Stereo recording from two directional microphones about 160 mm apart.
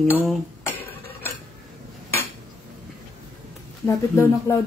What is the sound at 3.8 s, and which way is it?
Speech, 15° left (ahead or behind).